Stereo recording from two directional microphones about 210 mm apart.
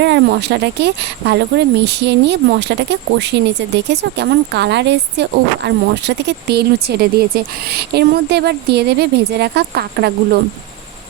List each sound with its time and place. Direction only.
0.0 s speech: 55° right (ahead or behind)